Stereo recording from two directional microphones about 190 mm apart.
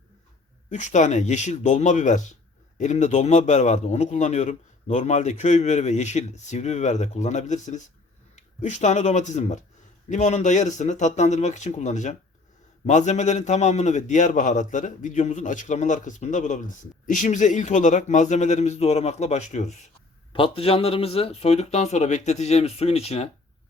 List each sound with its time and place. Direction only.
0.7 s a man's voice: 40° left (ahead or behind)